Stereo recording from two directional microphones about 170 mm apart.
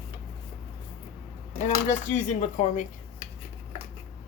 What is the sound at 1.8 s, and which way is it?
Speech, 50° left (ahead or behind).